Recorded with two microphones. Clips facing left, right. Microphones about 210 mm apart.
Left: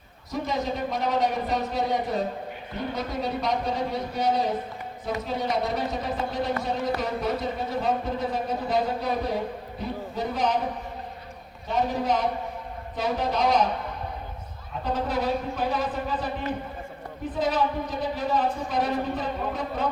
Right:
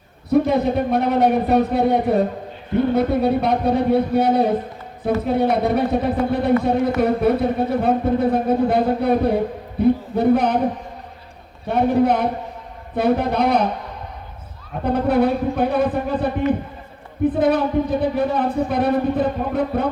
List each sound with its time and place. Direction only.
0.3 s speech: 60° right (ahead or behind)
11.7 s speech: 60° right (ahead or behind)
14.8 s speech: 60° right (ahead or behind)